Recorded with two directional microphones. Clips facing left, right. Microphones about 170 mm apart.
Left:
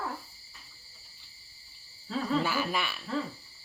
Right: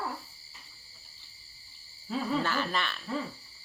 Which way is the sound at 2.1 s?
10° right (ahead or behind).